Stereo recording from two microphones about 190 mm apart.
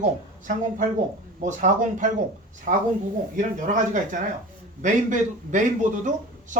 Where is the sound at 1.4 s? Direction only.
40° right (ahead or behind).